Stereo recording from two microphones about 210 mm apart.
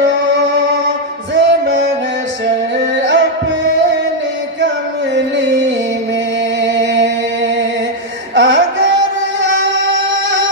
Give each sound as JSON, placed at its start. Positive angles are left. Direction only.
{"t": 1.3, "sound": "music", "side_deg": -60}
{"t": 3.0, "sound": "music", "side_deg": -60}
{"t": 6.6, "sound": "music", "side_deg": -60}